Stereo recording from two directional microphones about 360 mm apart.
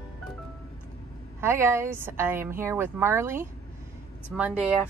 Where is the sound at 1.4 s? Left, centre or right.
Centre.